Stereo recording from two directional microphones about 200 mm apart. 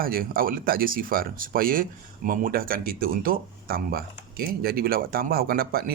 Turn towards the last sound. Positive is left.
turn(degrees=-45)  # may be behind; listen again after turning